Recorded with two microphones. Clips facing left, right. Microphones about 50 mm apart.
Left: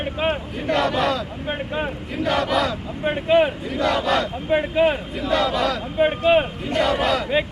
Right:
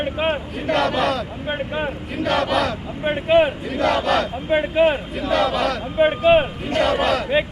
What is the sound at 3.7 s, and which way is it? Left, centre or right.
Battle cry, right.